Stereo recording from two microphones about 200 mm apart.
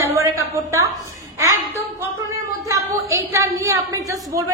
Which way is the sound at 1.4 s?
15° right (ahead or behind).